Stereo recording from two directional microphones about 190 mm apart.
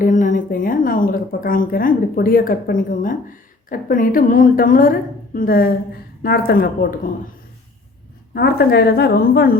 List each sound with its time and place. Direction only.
0.0 s a woman's voice: 45° left (ahead or behind)
8.3 s a woman's voice: 55° left (ahead or behind)